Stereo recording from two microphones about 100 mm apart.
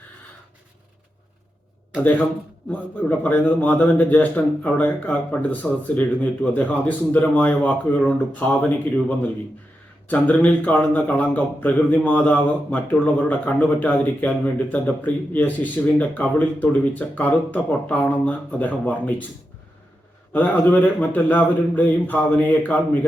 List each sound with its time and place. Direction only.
2.6 s speech: 15° left (ahead or behind)
20.3 s speech: 15° left (ahead or behind)